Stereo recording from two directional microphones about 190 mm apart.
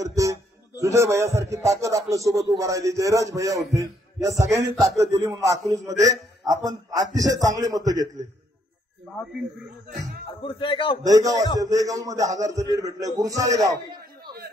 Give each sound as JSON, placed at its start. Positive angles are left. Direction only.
{"t": 0.0, "sound": "a man's voice", "side_deg": -15}
{"t": 10.4, "sound": "speech", "side_deg": 25}
{"t": 11.1, "sound": "a man's voice", "side_deg": -15}